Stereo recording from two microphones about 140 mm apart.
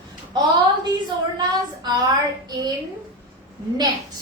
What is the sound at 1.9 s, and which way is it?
Speech, 30° right (ahead or behind).